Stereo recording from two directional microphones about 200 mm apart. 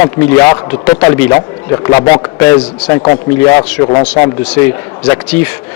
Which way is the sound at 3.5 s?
25° left (ahead or behind).